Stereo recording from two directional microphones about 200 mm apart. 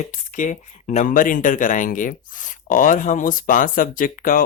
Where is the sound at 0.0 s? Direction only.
40° left (ahead or behind).